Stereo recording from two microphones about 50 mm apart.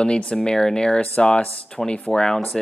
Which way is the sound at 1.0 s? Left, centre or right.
Left.